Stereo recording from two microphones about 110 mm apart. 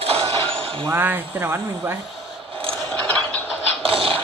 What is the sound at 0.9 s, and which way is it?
Speech, 20° right (ahead or behind).